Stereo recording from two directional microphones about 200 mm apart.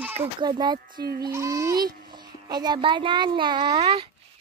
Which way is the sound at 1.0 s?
50° right (ahead or behind).